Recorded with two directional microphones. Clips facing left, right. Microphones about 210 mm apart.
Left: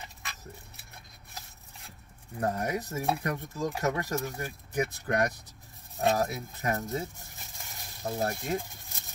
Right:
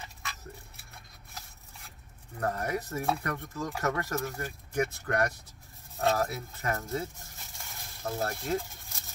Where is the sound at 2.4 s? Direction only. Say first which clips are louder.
Left 1 dB; 20° left (ahead or behind).